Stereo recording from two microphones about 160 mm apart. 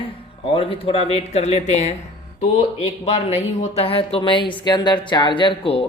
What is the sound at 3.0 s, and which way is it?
A woman's voice, 40° left (ahead or behind).